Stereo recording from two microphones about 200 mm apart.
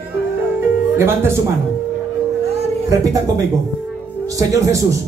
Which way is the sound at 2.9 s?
15° right (ahead or behind).